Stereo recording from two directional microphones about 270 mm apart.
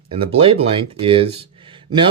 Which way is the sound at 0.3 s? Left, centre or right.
Right.